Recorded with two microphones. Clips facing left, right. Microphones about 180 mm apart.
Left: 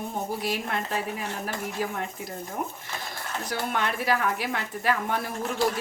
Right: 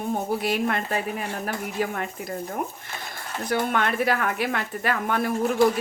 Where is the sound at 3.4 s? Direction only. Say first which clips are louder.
Right 5 dB; 55° right (ahead or behind).